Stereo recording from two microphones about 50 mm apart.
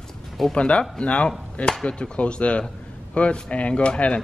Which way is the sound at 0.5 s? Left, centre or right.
Left.